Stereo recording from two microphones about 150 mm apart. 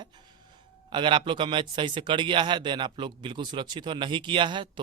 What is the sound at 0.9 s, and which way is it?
A man's voice, 30° right (ahead or behind).